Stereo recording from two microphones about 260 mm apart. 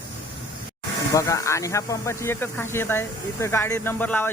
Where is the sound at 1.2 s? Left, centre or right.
Centre.